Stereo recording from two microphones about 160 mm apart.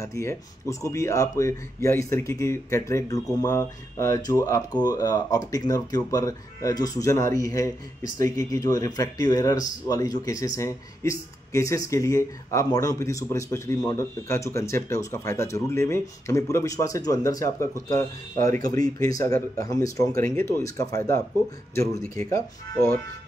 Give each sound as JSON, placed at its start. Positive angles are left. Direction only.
{"t": 0.0, "sound": "speech", "side_deg": 20}
{"t": 22.3, "sound": "speech", "side_deg": 20}